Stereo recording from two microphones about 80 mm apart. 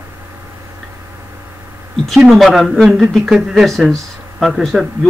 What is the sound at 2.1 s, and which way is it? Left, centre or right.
Speech, centre.